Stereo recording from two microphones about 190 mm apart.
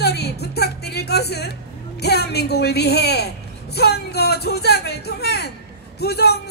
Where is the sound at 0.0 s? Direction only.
60° left (ahead or behind).